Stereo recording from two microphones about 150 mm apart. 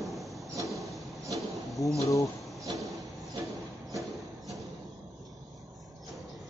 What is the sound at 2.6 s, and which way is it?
Vehicle, 20° right (ahead or behind).